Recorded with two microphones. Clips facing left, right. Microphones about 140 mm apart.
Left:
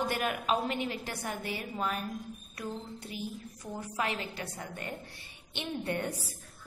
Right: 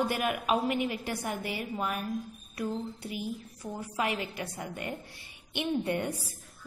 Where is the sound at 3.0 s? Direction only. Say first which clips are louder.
Right 3 dB; 10° right (ahead or behind).